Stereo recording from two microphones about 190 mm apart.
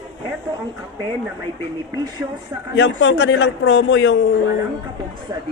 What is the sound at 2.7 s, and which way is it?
A man's voice, 65° left (ahead or behind).